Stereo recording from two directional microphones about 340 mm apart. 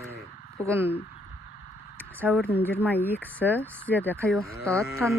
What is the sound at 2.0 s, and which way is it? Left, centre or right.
Speech, centre.